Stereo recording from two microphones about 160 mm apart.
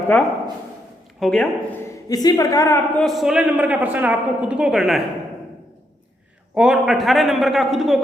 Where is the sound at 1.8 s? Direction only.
25° left (ahead or behind).